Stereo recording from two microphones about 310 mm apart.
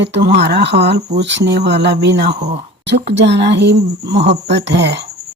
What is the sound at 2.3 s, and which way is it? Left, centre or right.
Speech, right.